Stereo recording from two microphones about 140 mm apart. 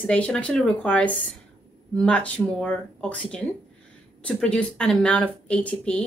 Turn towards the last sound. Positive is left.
turn(degrees=5)  # may be behind; listen again after turning